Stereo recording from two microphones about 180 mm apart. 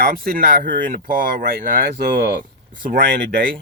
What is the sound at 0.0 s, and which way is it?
Speech, 55° right (ahead or behind).